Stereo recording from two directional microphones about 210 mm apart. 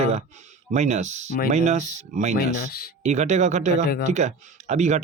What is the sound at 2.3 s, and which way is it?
Speech, 45° left (ahead or behind).